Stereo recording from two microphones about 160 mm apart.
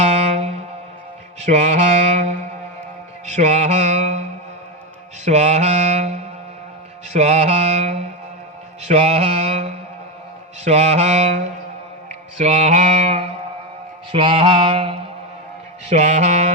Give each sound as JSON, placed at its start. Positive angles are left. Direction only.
{"t": 0.0, "sound": "music", "side_deg": -45}
{"t": 1.4, "sound": "mantra", "side_deg": -45}
{"t": 15.9, "sound": "mantra", "side_deg": -45}